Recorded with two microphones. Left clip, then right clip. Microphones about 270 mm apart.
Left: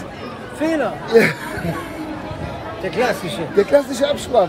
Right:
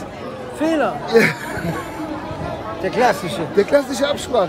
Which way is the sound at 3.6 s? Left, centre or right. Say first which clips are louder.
Left 1 dB; centre.